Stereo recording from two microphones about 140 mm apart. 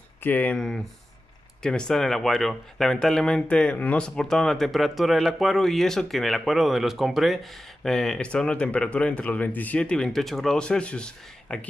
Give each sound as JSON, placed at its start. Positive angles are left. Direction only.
{"t": 0.2, "sound": "speech", "side_deg": 10}